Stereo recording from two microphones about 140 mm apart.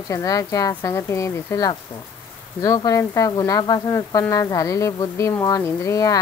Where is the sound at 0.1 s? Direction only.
25° left (ahead or behind).